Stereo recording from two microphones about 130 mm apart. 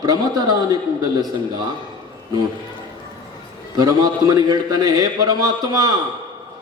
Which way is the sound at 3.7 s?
30° right (ahead or behind).